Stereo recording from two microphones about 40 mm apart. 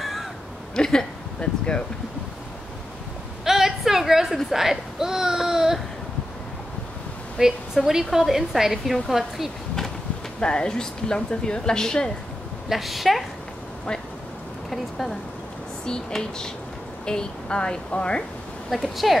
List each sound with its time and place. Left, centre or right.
0.0 s crow: centre
0.7 s a sound: centre
3.4 s a sound: centre
7.3 s speech: centre
10.4 s a woman's voice: left
12.6 s a woman's voice: centre
14.7 s speech: centre
15.8 s a woman's voice: centre
18.7 s a woman's voice: centre